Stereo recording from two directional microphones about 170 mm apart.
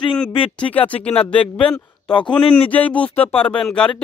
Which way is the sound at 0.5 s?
10° left (ahead or behind).